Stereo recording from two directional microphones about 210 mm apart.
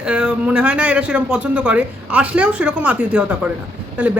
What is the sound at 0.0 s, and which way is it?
A woman's voice, 5° right (ahead or behind).